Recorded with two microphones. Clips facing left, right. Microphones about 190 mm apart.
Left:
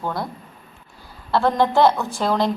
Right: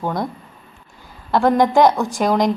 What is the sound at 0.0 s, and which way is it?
Speech, 20° right (ahead or behind).